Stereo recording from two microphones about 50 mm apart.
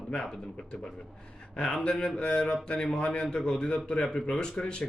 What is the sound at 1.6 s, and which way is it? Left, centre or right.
Speech, centre.